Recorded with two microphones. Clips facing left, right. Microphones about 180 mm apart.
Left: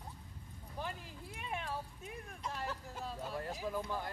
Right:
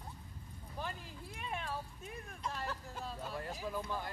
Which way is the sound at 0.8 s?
10° left (ahead or behind).